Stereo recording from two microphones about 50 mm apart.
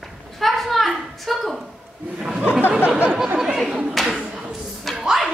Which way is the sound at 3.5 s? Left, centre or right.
Centre.